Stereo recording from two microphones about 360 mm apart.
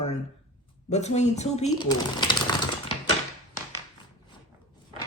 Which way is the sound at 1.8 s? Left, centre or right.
Centre.